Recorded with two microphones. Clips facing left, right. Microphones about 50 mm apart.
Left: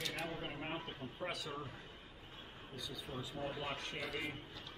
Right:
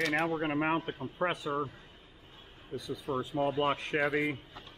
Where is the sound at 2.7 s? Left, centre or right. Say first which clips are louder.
Right 11 dB; right.